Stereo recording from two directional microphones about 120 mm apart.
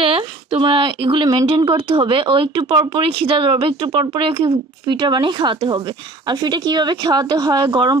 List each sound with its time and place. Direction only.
0.0 s speech: 50° right (ahead or behind)